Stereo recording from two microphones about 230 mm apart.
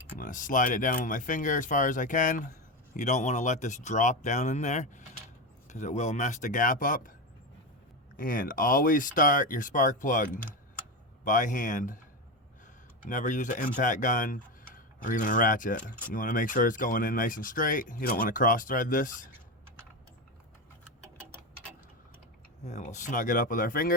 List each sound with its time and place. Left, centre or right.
0.2 s speech: left
8.1 s speech: left
11.3 s speech: left
13.0 s speech: left
22.6 s speech: left